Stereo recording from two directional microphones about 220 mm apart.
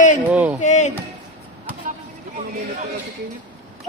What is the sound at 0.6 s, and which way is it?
Speech, 35° left (ahead or behind).